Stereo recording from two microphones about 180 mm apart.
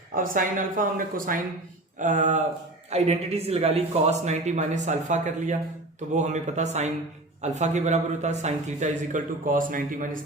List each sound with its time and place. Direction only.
0.1 s speech: 50° right (ahead or behind)